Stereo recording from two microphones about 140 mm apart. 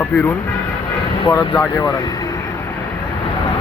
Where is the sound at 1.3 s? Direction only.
20° left (ahead or behind).